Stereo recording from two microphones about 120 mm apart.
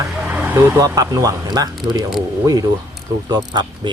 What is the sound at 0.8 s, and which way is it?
Speech, 30° right (ahead or behind).